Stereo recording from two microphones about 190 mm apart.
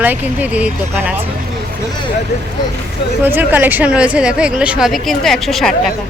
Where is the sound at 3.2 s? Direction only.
10° right (ahead or behind).